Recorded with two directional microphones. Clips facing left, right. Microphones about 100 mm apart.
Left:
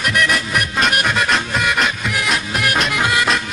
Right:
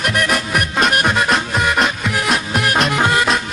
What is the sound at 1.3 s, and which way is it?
Music, 35° right (ahead or behind).